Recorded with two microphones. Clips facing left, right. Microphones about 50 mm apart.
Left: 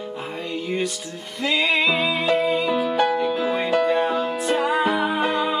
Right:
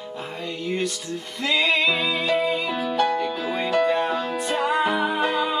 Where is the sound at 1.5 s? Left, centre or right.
Centre.